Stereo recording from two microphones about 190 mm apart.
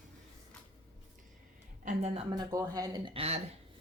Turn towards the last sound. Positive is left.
turn(degrees=-30)  # may be behind; listen again after turning